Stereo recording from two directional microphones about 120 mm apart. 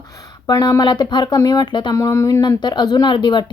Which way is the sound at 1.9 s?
25° left (ahead or behind).